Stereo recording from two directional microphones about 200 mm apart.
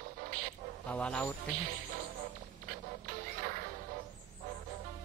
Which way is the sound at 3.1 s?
45° right (ahead or behind).